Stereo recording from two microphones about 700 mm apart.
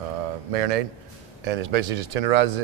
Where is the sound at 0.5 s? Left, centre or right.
Right.